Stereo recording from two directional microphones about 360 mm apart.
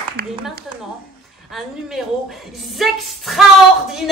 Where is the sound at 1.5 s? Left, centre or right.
Centre.